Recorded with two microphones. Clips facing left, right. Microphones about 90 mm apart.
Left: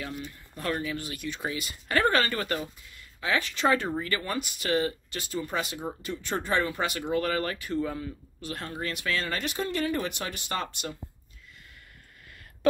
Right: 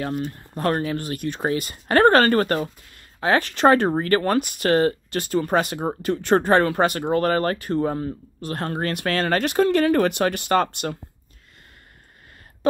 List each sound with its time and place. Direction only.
0.0 s speech: 50° right (ahead or behind)